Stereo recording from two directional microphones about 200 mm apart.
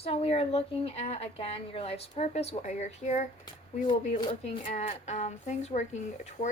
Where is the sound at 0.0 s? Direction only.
30° left (ahead or behind).